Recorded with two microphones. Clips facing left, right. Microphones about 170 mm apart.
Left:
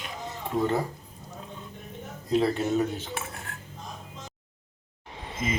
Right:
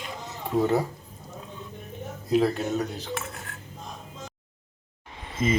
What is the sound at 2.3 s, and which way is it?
Speech, centre (ahead or behind).